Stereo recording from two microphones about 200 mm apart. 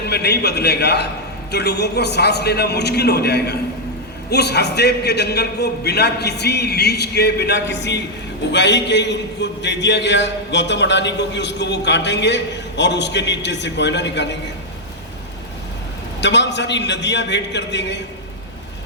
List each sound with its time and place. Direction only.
0.1 s a man's voice: 55° left (ahead or behind)
16.2 s a man's voice: 60° left (ahead or behind)